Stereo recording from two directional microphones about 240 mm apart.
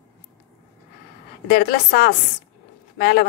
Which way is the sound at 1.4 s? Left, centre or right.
Left.